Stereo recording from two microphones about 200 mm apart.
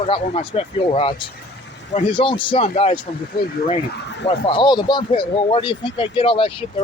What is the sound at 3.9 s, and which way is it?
Speech, 60° left (ahead or behind).